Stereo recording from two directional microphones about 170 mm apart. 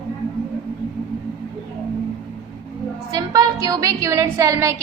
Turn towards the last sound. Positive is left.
turn(degrees=-15)  # may be behind; listen again after turning